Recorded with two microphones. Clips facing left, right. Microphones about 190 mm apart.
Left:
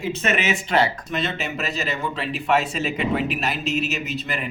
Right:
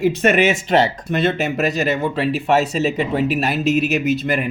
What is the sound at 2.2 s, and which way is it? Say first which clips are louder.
Speech: right 3 dB; 45° right (ahead or behind).